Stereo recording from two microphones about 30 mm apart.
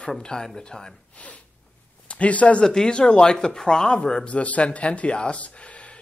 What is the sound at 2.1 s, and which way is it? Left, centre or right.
Speech, left.